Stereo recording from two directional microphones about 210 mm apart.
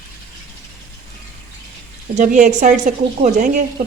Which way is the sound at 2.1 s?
35° right (ahead or behind).